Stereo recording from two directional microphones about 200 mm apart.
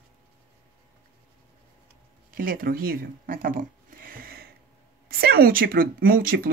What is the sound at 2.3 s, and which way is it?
A woman's voice, 45° right (ahead or behind).